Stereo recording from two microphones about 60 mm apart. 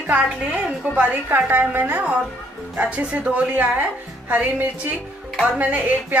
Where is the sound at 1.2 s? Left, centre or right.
Right.